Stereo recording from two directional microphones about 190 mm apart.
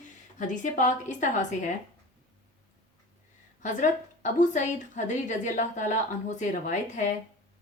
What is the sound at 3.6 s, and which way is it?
A woman's voice, 40° left (ahead or behind).